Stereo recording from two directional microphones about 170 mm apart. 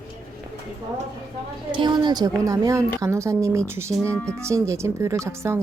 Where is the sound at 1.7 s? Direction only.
25° right (ahead or behind).